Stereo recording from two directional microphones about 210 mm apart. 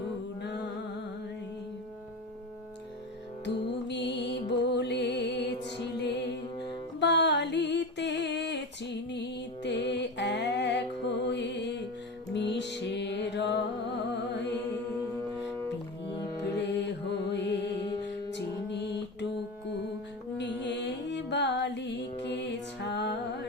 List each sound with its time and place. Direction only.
3.4 s music: 55° left (ahead or behind)
16.0 s music: 55° left (ahead or behind)
20.4 s music: 55° left (ahead or behind)